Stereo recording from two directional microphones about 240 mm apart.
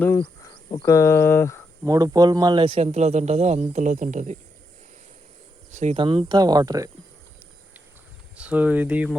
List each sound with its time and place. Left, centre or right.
0.0 s speech: centre
1.8 s a man's voice: centre; by 4.4 s right
5.7 s speech: right
8.4 s speech: centre